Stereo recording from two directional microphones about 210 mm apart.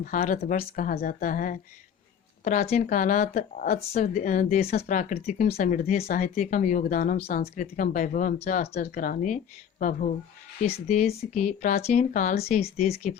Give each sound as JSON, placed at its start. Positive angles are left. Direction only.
{"t": 0.0, "sound": "speech", "side_deg": 40}